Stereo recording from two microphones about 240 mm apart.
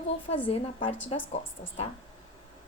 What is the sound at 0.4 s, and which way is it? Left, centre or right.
A woman's voice, left.